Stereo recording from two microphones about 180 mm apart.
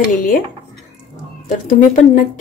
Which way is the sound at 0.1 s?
50° left (ahead or behind).